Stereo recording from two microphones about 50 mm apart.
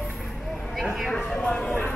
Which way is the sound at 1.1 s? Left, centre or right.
Left.